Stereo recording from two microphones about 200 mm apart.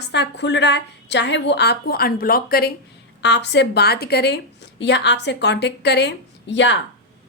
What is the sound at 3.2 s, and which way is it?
A woman's voice, 60° left (ahead or behind).